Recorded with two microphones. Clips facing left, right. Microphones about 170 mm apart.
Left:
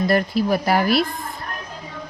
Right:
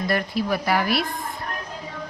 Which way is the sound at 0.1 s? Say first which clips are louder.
Left 2 dB; 35° left (ahead or behind).